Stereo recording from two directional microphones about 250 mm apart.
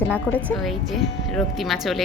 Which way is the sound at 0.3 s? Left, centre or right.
Centre.